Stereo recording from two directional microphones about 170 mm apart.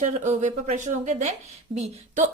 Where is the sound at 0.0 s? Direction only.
45° right (ahead or behind).